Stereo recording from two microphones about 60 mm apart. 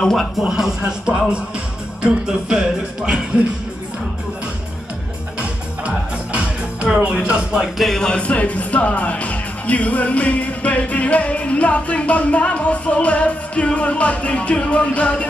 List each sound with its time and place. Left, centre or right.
0.0 s speech: centre
0.4 s speech: centre
5.4 s music: centre
7.0 s speech: centre
7.7 s speech: centre
8.1 s speech: left